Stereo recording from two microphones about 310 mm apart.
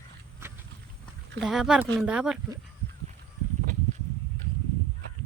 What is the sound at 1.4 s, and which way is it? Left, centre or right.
Speech, centre.